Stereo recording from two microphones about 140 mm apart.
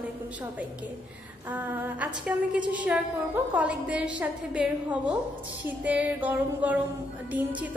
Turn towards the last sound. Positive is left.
turn(degrees=-10)  # may be behind; listen again after turning